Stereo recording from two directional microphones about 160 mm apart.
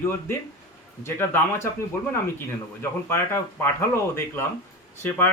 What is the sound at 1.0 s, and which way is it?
Speech, 15° left (ahead or behind).